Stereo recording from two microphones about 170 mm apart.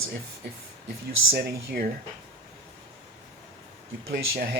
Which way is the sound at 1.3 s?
65° right (ahead or behind).